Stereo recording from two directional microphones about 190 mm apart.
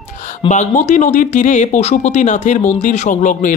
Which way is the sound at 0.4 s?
40° left (ahead or behind).